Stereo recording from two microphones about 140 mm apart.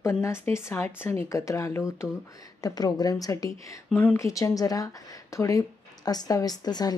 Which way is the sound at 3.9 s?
10° left (ahead or behind).